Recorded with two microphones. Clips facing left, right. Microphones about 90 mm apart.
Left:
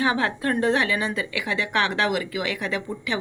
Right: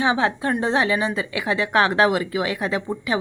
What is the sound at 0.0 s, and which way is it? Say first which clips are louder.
Speech: right 3 dB; 20° right (ahead or behind).